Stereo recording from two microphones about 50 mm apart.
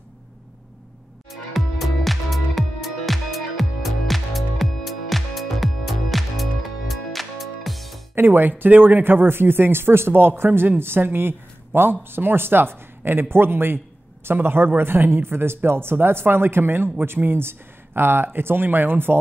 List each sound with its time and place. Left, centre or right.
1.3 s music: centre
8.1 s speech: right